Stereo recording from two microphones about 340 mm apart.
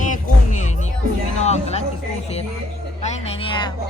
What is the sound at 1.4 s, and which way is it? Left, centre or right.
Music, centre.